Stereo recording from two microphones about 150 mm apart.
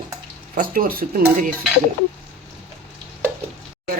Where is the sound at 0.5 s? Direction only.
70° right (ahead or behind).